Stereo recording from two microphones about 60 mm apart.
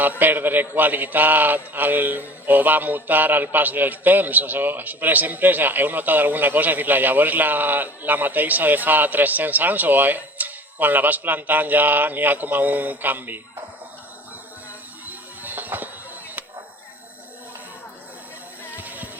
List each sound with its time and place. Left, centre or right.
0.0 s a man's voice: right
15.0 s music: right
18.8 s music: right